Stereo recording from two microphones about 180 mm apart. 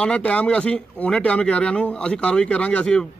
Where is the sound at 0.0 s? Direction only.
5° left (ahead or behind).